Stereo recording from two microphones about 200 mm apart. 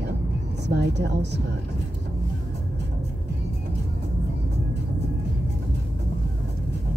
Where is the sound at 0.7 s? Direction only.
60° right (ahead or behind).